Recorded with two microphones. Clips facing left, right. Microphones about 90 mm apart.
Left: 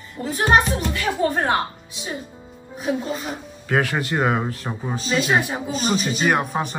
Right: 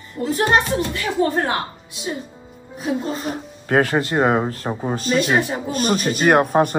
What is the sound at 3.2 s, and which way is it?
Speech, 40° right (ahead or behind).